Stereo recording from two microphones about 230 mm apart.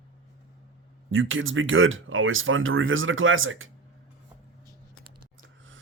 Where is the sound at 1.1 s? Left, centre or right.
Right.